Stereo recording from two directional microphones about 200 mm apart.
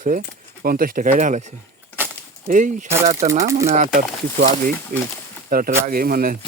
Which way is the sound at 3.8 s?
40° right (ahead or behind).